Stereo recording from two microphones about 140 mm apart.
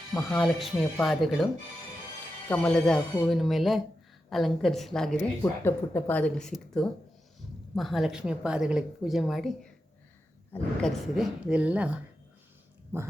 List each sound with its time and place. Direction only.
0.1 s a woman's voice: 10° left (ahead or behind)
2.5 s a woman's voice: 10° left (ahead or behind)
5.4 s a woman's voice: 15° left (ahead or behind); by 9.6 s centre (ahead or behind)
10.8 s a woman's voice: centre (ahead or behind); by 13.1 s 20° right (ahead or behind)